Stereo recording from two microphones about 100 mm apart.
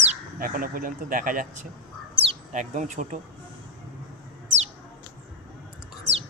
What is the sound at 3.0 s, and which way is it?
Speech, 90° right.